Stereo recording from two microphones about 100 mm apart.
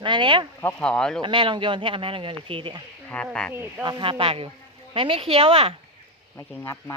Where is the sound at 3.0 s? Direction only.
10° left (ahead or behind).